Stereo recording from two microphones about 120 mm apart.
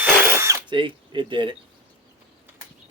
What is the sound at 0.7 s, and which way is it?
Speech, 40° right (ahead or behind).